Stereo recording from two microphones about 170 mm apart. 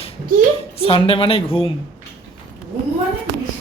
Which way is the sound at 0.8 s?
35° left (ahead or behind).